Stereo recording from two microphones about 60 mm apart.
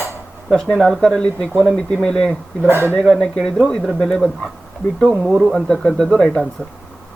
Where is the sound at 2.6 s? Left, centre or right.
Right.